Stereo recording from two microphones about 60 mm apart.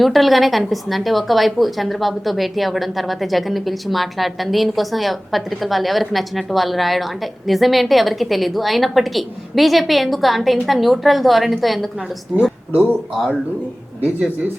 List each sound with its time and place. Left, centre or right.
0.0 s a woman's voice: centre
12.7 s speech: right
13.1 s a woman's voice: centre